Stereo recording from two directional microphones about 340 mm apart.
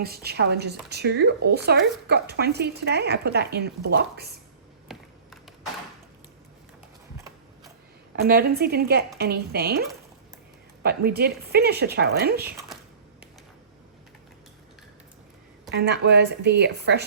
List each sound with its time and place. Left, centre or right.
0.0 s speech: right
4.9 s a sound: centre
8.1 s speech: right
10.8 s speech: right
12.5 s a sound: centre
15.7 s speech: right